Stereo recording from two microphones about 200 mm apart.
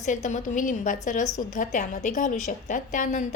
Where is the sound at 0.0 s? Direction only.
40° left (ahead or behind).